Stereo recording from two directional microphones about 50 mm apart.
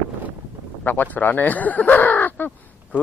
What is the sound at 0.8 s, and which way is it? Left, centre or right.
Speech, left.